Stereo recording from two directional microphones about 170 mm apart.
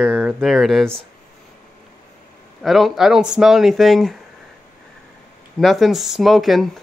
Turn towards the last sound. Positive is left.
turn(degrees=0)  # may be behind; listen again after turning